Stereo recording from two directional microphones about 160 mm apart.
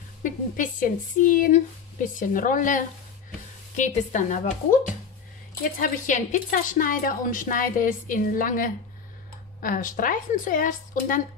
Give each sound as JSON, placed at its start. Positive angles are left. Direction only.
{"t": 0.2, "sound": "a woman's voice", "side_deg": 55}